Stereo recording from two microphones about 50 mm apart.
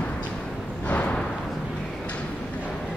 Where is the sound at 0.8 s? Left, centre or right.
Left.